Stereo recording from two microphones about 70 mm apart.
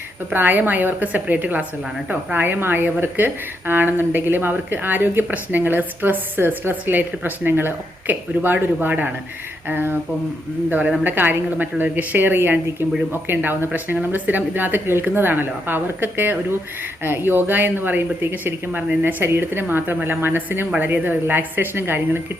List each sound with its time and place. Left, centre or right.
0.3 s a woman's voice: right